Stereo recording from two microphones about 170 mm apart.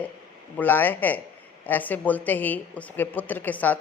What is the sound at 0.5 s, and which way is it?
A woman's voice, 10° left (ahead or behind).